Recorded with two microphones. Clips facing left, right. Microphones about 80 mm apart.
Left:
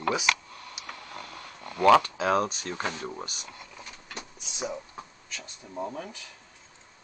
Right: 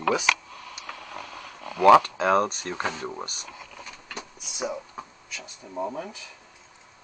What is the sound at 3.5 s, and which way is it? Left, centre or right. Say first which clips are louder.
Vehicle: right 3 dB; centre.